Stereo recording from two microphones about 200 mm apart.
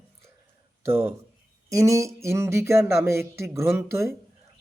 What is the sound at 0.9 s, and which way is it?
Speech, 10° right (ahead or behind).